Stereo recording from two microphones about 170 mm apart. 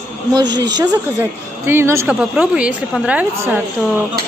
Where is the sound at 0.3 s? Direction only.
25° right (ahead or behind).